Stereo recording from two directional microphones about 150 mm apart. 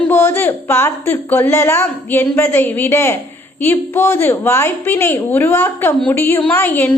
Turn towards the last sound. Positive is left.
turn(degrees=15)  # may be behind; listen again after turning